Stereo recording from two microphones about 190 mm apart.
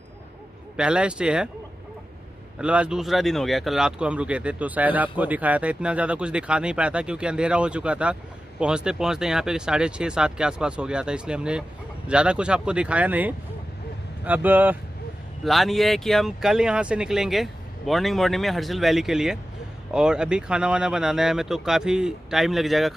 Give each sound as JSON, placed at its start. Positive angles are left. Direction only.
{"t": 0.7, "sound": "speech", "side_deg": -5}
{"t": 2.6, "sound": "speech", "side_deg": -5}